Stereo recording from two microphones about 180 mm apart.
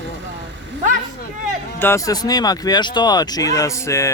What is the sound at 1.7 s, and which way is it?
Speech, 15° left (ahead or behind).